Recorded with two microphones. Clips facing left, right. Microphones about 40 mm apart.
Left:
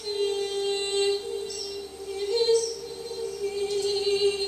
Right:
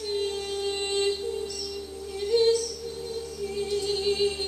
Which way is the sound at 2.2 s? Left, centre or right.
Centre.